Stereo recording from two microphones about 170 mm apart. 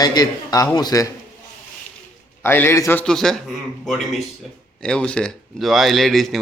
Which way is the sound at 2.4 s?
10° left (ahead or behind).